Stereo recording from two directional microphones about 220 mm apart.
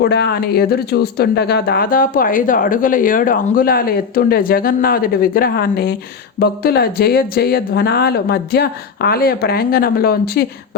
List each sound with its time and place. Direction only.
0.0 s speech: 50° left (ahead or behind)